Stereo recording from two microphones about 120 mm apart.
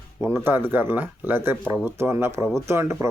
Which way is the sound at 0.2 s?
20° right (ahead or behind).